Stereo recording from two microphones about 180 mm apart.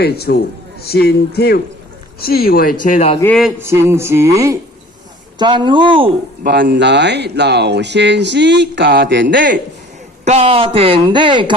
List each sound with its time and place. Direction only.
0.0 s speech: 65° left (ahead or behind); by 3.2 s 40° left (ahead or behind)
3.6 s music: 15° right (ahead or behind)
5.4 s speech: 25° right (ahead or behind)
6.4 s speech: 70° right (ahead or behind)
10.2 s speech: 35° right (ahead or behind)